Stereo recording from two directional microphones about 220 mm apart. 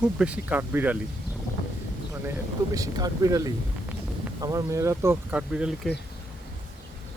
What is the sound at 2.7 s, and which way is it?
Speech, 15° right (ahead or behind).